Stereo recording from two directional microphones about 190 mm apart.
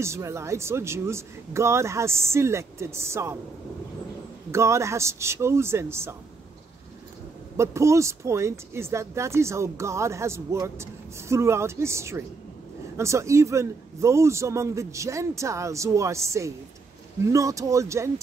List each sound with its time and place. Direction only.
0.0 s speech: 15° right (ahead or behind)
4.5 s speech: 15° right (ahead or behind)
7.5 s speech: 15° right (ahead or behind)